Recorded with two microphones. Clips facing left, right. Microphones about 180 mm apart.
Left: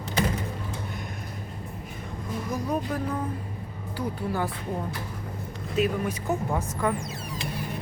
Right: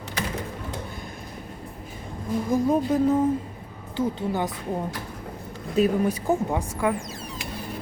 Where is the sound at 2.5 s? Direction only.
25° right (ahead or behind).